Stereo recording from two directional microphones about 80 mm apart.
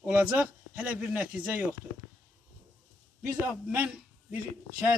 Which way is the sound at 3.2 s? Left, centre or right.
Centre.